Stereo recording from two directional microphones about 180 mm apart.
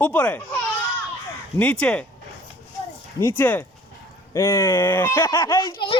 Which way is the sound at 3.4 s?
10° left (ahead or behind).